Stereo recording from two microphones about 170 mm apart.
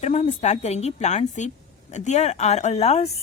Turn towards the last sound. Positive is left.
turn(degrees=40)  # may be behind; listen again after turning